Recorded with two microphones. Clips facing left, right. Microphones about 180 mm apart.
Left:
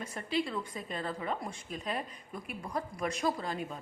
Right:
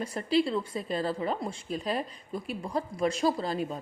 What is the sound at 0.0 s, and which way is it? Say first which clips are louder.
Speech: right 7 dB; 35° right (ahead or behind).